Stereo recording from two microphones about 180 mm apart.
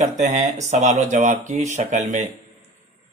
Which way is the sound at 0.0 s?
40° right (ahead or behind).